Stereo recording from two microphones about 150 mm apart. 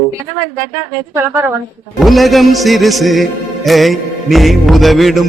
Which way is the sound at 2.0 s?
Centre (ahead or behind).